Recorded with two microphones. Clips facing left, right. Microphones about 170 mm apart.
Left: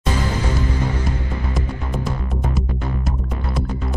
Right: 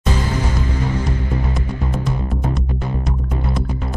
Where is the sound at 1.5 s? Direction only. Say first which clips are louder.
Right 2 dB; centre (ahead or behind).